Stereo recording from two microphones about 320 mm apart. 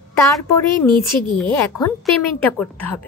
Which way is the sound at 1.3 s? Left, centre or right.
Centre.